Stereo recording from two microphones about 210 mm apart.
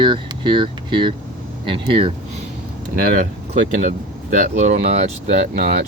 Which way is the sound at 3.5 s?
40° right (ahead or behind).